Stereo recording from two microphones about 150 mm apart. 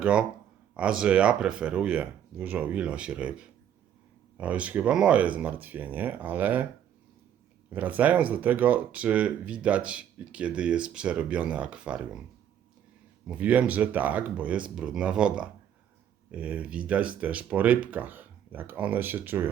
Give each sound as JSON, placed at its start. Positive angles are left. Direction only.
{"t": 0.0, "sound": "speech", "side_deg": -5}
{"t": 7.7, "sound": "speech", "side_deg": -10}
{"t": 13.2, "sound": "speech", "side_deg": -10}